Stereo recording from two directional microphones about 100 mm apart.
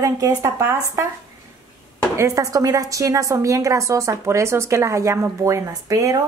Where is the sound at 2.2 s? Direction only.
35° right (ahead or behind).